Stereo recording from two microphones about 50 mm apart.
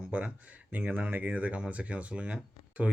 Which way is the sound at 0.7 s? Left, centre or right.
Right.